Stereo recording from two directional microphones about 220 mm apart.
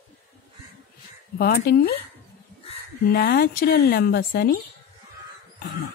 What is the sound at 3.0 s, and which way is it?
A woman's voice, 45° left (ahead or behind).